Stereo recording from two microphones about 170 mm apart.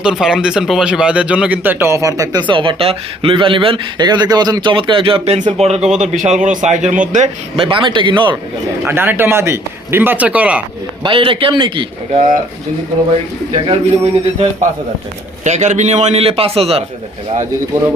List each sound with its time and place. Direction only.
0.0 s speech: 5° right (ahead or behind); by 5.5 s 40° right (ahead or behind)
5.8 s speech: centre (ahead or behind)
6.1 s a man's voice: 40° right (ahead or behind)
7.5 s speech: 30° right (ahead or behind)
8.8 s a man's voice: 10° right (ahead or behind)
11.0 s speech: 30° right (ahead or behind)
13.5 s a man's voice: 35° right (ahead or behind)
15.4 s a man's voice: 45° right (ahead or behind)